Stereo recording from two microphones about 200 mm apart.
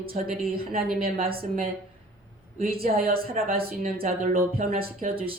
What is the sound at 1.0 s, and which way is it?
Speech, 45° right (ahead or behind).